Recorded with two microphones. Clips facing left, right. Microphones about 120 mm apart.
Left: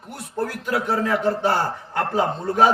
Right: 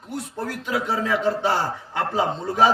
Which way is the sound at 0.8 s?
55° left (ahead or behind).